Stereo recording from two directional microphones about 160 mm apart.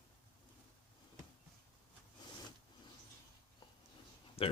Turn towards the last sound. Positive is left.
turn(degrees=35)  # may be behind; listen again after turning